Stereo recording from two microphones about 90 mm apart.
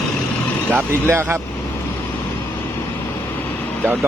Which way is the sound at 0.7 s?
20° right (ahead or behind).